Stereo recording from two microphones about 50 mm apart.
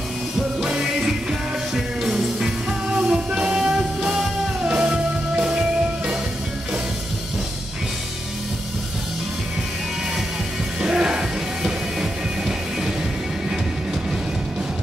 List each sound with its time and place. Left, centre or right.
0.4 s music: centre
10.8 s music: centre